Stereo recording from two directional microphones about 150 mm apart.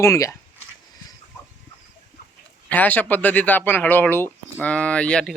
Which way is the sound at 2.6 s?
10° left (ahead or behind).